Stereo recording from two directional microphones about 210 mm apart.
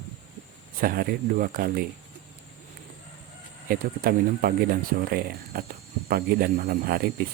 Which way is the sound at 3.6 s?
45° right (ahead or behind).